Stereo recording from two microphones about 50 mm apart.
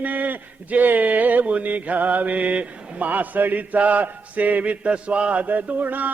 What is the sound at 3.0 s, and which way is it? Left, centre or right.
Chant, right.